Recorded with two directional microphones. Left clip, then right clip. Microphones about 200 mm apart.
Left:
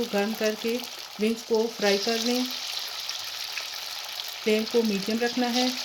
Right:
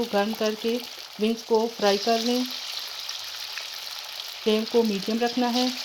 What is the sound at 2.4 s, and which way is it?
Frying, 10° left (ahead or behind).